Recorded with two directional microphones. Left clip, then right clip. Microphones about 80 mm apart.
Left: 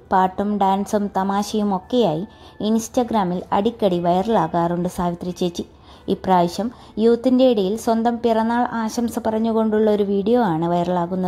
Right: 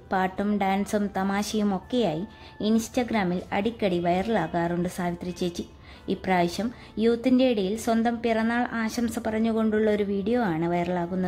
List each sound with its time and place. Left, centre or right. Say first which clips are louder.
0.1 s a woman's voice: left 8 dB; left